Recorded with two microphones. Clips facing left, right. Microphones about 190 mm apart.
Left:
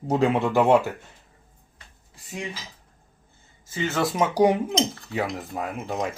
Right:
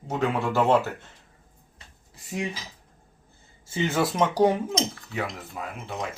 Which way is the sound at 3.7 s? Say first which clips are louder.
Right 1 dB; 15° right (ahead or behind).